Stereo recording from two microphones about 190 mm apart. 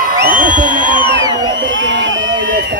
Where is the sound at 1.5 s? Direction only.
75° right (ahead or behind).